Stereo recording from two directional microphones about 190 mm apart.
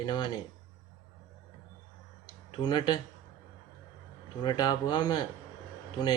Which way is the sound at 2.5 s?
25° left (ahead or behind).